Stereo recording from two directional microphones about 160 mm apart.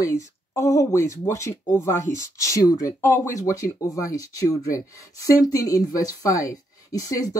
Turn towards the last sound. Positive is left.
turn(degrees=20)  # may be behind; listen again after turning